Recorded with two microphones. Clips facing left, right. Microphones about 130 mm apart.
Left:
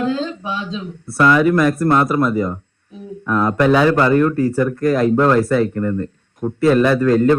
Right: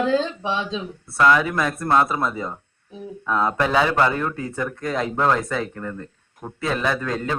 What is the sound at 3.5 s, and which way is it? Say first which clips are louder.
Speech: left 8 dB; centre (ahead or behind).